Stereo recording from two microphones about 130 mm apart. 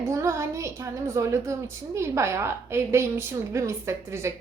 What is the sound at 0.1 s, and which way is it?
A woman's voice, 20° right (ahead or behind).